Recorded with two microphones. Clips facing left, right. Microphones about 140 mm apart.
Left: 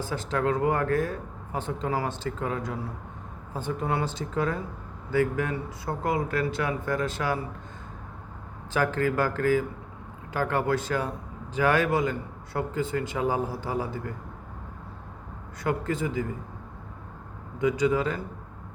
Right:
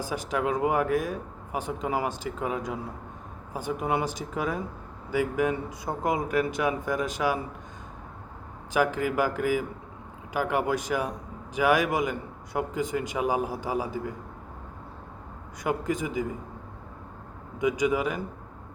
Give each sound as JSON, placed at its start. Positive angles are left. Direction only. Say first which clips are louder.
{"t": 0.0, "sound": "speech", "louder": "left 1 dB", "side_deg": -15}
{"t": 8.7, "sound": "speech", "louder": "even", "side_deg": -15}
{"t": 15.6, "sound": "speech", "louder": "even", "side_deg": -15}
{"t": 17.6, "sound": "speech", "louder": "left 1 dB", "side_deg": -15}